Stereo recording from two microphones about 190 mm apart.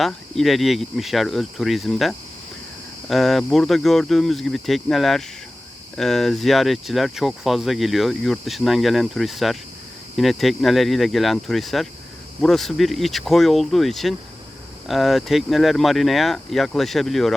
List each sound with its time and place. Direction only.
0.0 s speech: centre (ahead or behind)